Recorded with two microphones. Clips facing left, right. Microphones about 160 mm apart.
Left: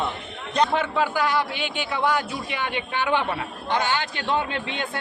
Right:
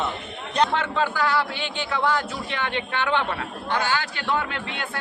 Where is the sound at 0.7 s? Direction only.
10° left (ahead or behind).